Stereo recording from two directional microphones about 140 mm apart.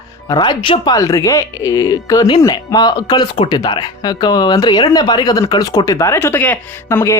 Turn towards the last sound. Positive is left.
turn(degrees=20)  # may be behind; listen again after turning